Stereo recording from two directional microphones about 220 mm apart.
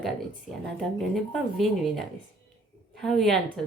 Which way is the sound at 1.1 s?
Centre (ahead or behind).